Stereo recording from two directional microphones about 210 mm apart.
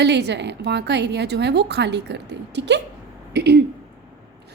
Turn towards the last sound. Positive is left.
turn(degrees=-55)  # may be behind; listen again after turning